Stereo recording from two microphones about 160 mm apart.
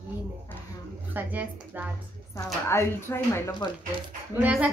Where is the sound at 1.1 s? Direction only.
10° right (ahead or behind).